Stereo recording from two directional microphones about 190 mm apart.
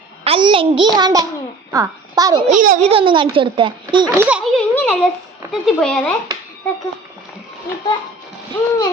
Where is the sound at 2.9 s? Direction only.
25° right (ahead or behind).